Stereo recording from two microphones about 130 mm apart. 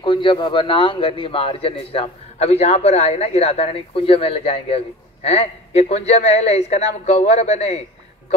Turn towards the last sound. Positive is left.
turn(degrees=55)  # may be behind; listen again after turning